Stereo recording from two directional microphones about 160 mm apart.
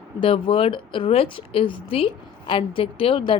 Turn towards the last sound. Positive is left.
turn(degrees=30)  # may be behind; listen again after turning